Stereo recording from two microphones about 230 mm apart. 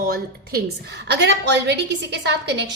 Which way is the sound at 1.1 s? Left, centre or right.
Right.